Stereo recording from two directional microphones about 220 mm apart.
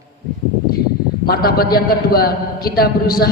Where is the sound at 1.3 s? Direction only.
45° left (ahead or behind).